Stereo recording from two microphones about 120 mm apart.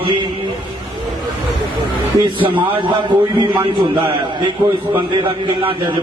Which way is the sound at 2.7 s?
40° right (ahead or behind).